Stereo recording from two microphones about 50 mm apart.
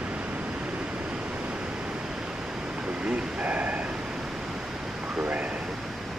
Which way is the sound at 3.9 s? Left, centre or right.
Centre.